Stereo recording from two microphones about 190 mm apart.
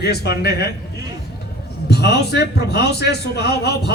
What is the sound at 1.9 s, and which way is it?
A man's voice, 60° left (ahead or behind).